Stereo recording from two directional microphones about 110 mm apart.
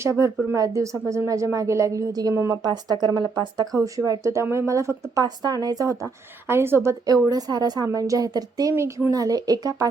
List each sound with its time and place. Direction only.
0.0 s speech: 25° right (ahead or behind)
2.6 s speech: 40° right (ahead or behind)
6.5 s speech: 20° right (ahead or behind)
7.0 s speech: 35° right (ahead or behind)
8.7 s speech: 20° right (ahead or behind)